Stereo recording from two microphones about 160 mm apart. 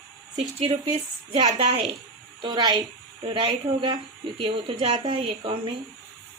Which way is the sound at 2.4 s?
25° right (ahead or behind).